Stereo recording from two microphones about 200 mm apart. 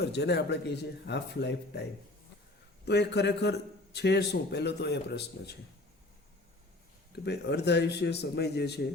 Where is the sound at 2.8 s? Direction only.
55° left (ahead or behind).